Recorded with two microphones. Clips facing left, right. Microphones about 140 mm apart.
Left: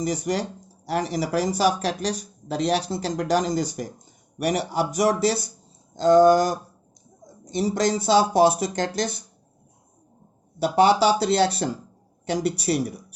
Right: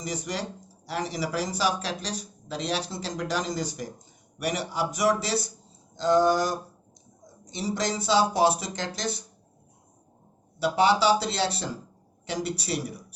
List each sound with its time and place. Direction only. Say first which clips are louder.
0.0 s speech: left 7 dB; 45° left (ahead or behind)
7.5 s speech: left 6 dB; 45° left (ahead or behind)
10.6 s speech: left 4 dB; 45° left (ahead or behind)